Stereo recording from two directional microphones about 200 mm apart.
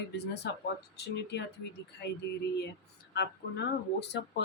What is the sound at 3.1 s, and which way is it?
Speech, 55° left (ahead or behind).